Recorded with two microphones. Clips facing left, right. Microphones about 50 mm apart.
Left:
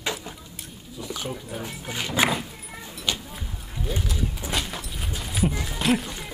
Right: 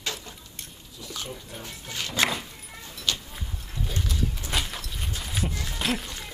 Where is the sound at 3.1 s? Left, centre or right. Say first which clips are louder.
Left 1 dB; centre.